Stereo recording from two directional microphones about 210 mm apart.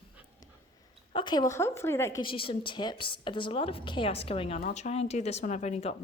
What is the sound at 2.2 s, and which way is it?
A woman's voice, 25° left (ahead or behind).